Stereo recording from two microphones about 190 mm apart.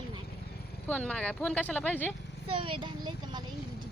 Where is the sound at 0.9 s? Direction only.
5° left (ahead or behind).